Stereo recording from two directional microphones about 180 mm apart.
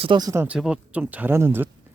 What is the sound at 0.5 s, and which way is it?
Speech, 5° right (ahead or behind).